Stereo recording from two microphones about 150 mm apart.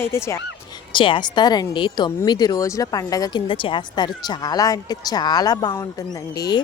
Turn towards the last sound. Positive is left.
turn(degrees=25)  # may be behind; listen again after turning